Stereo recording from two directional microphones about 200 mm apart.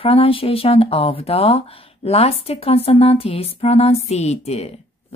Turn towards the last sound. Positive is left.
turn(degrees=30)  # may be behind; listen again after turning